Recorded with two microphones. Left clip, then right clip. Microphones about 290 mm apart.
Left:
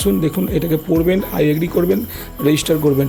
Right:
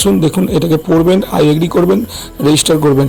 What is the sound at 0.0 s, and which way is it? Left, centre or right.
Speech, right.